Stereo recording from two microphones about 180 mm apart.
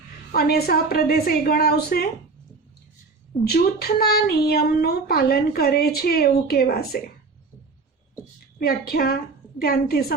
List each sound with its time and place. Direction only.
0.3 s speech: 60° left (ahead or behind)
3.4 s speech: 60° left (ahead or behind)
8.5 s speech: 55° left (ahead or behind)